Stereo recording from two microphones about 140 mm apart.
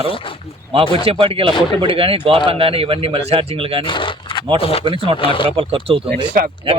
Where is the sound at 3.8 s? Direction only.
35° left (ahead or behind).